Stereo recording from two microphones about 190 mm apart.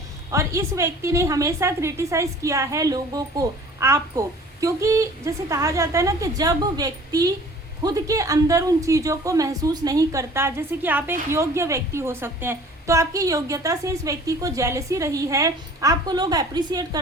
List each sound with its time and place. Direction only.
0.3 s a woman's voice: 15° right (ahead or behind)